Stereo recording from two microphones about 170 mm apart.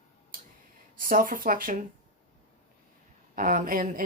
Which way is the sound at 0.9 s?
55° right (ahead or behind).